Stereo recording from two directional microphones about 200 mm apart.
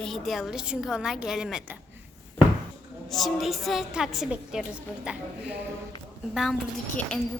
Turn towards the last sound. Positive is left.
turn(degrees=5)  # may be behind; listen again after turning